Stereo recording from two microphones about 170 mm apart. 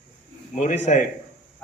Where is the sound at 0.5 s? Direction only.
45° left (ahead or behind).